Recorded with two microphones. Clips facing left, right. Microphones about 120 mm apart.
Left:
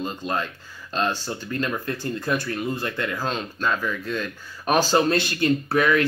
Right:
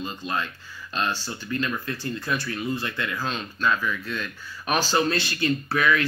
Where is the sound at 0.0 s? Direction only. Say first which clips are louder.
Left 3 dB; 45° left (ahead or behind).